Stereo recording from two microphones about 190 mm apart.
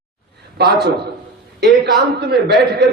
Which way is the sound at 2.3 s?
60° right (ahead or behind).